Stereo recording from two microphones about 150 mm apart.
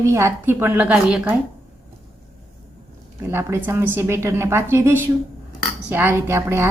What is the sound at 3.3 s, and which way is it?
A woman's voice, 15° right (ahead or behind).